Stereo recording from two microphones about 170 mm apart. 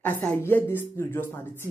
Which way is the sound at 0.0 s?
10° left (ahead or behind).